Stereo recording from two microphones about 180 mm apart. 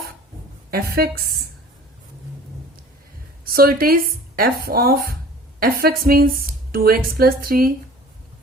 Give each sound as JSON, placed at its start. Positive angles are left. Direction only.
{"t": 0.7, "sound": "speech", "side_deg": -60}
{"t": 3.4, "sound": "a woman's voice", "side_deg": -55}